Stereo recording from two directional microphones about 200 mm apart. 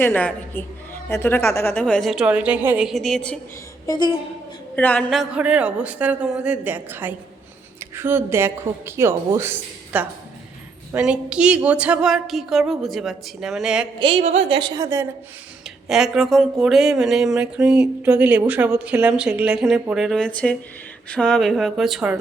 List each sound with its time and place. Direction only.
0.0 s a woman's voice: 10° left (ahead or behind)
3.8 s a woman's voice: 25° left (ahead or behind)
4.7 s speech: 10° left (ahead or behind)
14.0 s a woman's voice: 30° right (ahead or behind); by 15.0 s 15° right (ahead or behind)
15.9 s speech: centre (ahead or behind)